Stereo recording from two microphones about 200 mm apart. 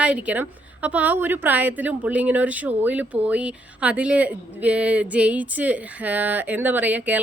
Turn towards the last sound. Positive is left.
turn(degrees=-10)  # may be behind; listen again after turning